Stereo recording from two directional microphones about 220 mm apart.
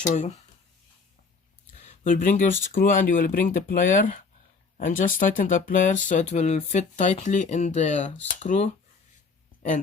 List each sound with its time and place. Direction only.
1.8 s speech: 35° left (ahead or behind)